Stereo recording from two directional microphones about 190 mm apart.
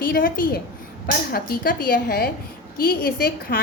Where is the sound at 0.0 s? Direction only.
50° left (ahead or behind).